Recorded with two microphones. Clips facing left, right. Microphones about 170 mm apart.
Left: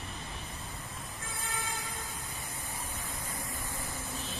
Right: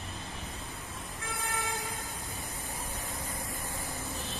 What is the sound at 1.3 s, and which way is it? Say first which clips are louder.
Vehicle: right 4 dB; 65° right (ahead or behind).